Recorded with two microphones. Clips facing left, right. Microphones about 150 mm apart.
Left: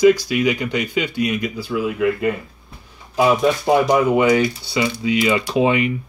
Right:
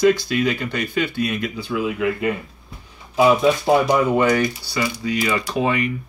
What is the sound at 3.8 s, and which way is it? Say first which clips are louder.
Speech: left 2 dB; 10° left (ahead or behind).